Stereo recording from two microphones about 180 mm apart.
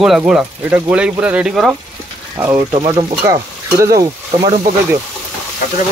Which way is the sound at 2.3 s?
15° right (ahead or behind).